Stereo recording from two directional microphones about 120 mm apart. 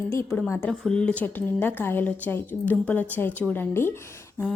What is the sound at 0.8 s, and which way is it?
A woman's voice, 5° left (ahead or behind).